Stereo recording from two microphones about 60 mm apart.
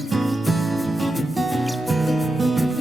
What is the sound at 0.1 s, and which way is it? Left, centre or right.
Music, centre.